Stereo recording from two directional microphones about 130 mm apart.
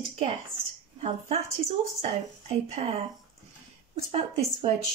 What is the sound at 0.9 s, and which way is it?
A woman's voice, 55° right (ahead or behind).